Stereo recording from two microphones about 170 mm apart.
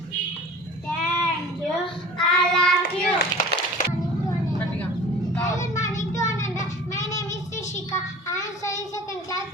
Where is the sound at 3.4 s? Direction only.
50° left (ahead or behind).